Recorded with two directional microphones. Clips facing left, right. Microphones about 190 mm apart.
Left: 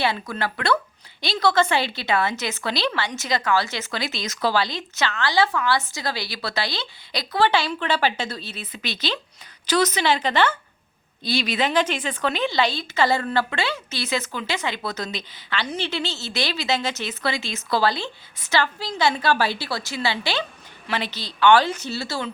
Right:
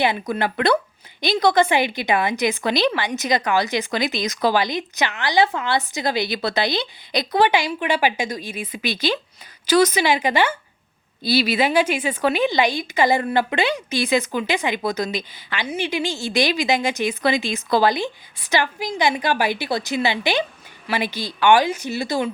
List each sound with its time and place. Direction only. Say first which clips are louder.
0.0 s a woman's voice: right 4 dB; 15° right (ahead or behind)